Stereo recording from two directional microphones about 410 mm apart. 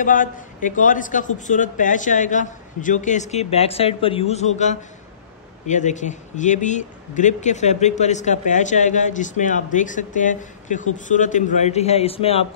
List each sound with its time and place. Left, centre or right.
0.0 s speech: centre